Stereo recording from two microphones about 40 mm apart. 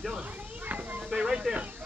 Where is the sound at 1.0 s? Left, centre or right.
Centre.